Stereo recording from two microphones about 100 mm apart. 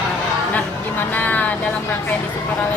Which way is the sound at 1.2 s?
15° left (ahead or behind).